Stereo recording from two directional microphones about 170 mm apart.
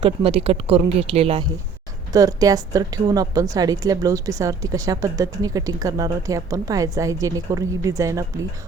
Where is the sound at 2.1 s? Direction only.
20° right (ahead or behind).